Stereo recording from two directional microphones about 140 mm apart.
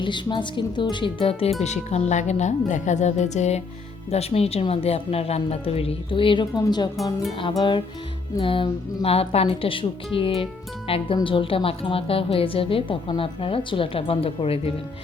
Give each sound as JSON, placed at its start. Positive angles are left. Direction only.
{"t": 0.0, "sound": "a woman's voice", "side_deg": 35}